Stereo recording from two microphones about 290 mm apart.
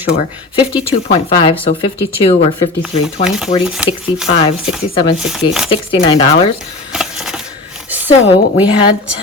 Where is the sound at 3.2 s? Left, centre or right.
Centre.